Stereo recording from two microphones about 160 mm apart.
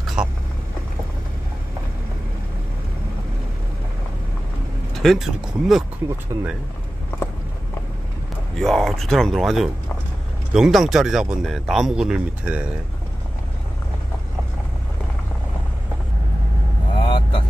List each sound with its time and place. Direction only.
0.0 s vehicle: 5° right (ahead or behind)
4.9 s speech: centre (ahead or behind)
6.3 s speech: 25° right (ahead or behind)
8.5 s speech: centre (ahead or behind)
16.9 s vehicle: 30° left (ahead or behind)